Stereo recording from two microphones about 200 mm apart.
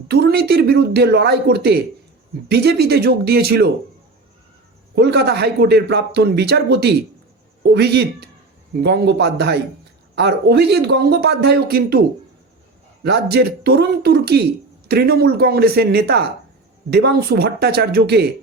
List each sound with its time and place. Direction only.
0.1 s speech: 55° right (ahead or behind)
4.9 s speech: 55° right (ahead or behind)
13.1 s speech: 55° right (ahead or behind)